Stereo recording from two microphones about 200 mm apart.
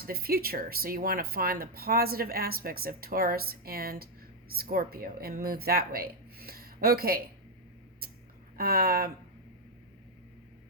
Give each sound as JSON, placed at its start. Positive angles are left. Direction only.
{"t": 0.0, "sound": "speech", "side_deg": -50}
{"t": 8.5, "sound": "speech", "side_deg": -50}